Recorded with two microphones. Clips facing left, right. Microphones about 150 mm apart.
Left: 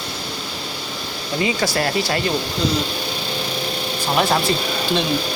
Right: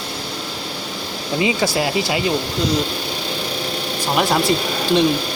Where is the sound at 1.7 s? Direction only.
5° right (ahead or behind).